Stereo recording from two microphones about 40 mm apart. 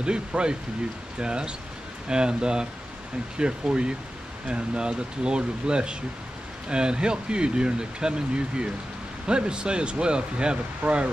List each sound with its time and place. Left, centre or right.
0.0 s speech: right